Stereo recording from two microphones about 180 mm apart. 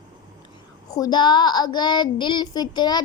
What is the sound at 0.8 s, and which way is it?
A woman's voice, 20° left (ahead or behind).